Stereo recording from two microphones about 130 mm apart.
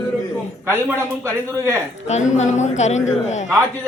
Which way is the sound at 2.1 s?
60° left (ahead or behind).